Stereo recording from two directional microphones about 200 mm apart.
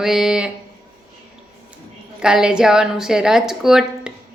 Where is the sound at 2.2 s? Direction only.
5° right (ahead or behind).